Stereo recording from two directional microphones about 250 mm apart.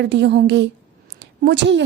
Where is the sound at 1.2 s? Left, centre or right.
Right.